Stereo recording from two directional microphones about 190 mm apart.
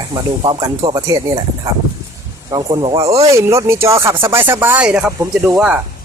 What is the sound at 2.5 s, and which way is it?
Speech, 20° right (ahead or behind).